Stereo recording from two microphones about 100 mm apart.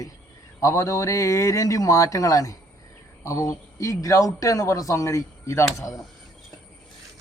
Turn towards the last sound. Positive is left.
turn(degrees=35)  # may be behind; listen again after turning